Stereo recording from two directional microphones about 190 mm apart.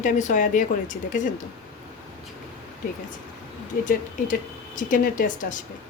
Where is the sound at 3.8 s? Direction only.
45° left (ahead or behind).